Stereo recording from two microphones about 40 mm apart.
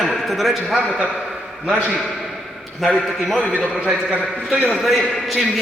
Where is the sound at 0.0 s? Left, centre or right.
Centre.